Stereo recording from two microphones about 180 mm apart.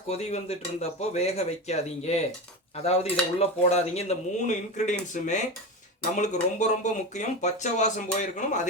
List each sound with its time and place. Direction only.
0.1 s speech: 35° left (ahead or behind)